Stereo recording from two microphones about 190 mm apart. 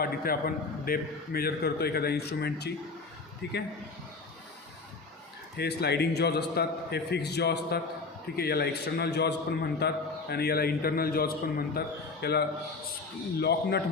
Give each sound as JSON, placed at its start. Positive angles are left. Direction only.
{"t": 0.0, "sound": "a man's voice", "side_deg": 50}
{"t": 5.5, "sound": "a man's voice", "side_deg": 60}